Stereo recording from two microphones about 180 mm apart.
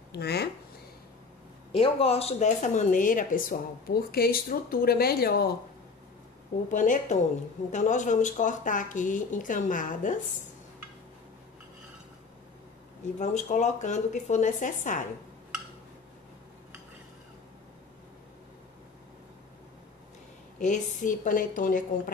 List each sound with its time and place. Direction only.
0.1 s speech: 65° left (ahead or behind)
1.7 s speech: 35° left (ahead or behind); by 5.5 s 60° left (ahead or behind)
6.7 s speech: 45° left (ahead or behind)
13.2 s speech: 40° left (ahead or behind)
20.5 s speech: 45° left (ahead or behind)